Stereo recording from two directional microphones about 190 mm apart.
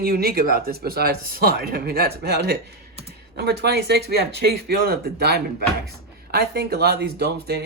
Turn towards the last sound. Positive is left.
turn(degrees=-60)  # may be behind; listen again after turning